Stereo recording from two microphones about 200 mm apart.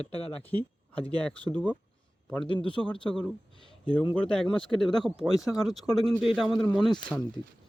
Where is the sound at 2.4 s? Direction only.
25° left (ahead or behind).